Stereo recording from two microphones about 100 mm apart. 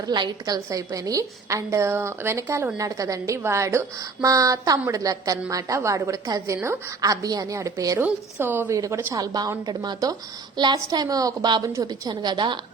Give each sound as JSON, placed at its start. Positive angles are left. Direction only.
{"t": 0.0, "sound": "a woman's voice", "side_deg": -40}
{"t": 7.9, "sound": "a woman's voice", "side_deg": -20}
{"t": 8.7, "sound": "a woman's voice", "side_deg": -30}
{"t": 9.2, "sound": "a woman's voice", "side_deg": -40}